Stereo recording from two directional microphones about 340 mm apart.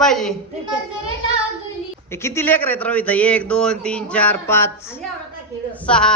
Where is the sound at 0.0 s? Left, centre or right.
Centre.